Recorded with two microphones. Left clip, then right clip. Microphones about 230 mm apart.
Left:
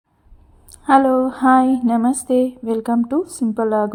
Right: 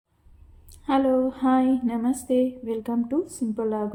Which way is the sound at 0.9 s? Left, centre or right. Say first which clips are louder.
Left 8 dB; left.